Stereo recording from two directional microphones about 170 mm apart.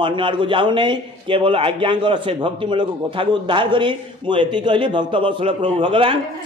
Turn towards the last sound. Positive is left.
turn(degrees=-30)  # may be behind; listen again after turning